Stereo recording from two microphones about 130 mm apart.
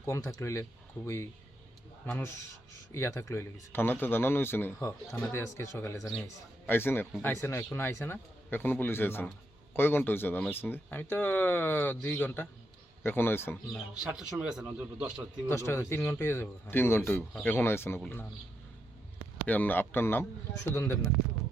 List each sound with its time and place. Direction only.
0.0 s speech: 25° left (ahead or behind)
13.7 s a man's voice: 5° right (ahead or behind)
15.4 s speech: 20° left (ahead or behind)
19.5 s speech: 15° left (ahead or behind)